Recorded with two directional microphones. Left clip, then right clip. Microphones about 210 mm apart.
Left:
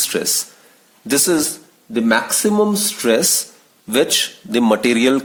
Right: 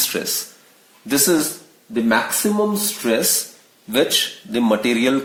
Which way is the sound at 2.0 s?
50° left (ahead or behind).